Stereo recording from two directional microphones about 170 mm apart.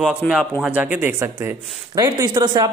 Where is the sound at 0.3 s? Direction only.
5° right (ahead or behind).